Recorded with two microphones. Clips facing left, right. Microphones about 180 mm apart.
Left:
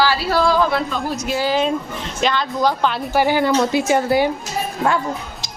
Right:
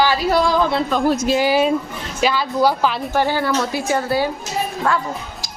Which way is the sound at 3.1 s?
15° left (ahead or behind).